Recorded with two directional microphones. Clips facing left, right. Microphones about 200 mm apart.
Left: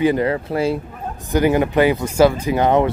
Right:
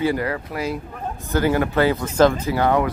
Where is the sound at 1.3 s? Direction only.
15° left (ahead or behind).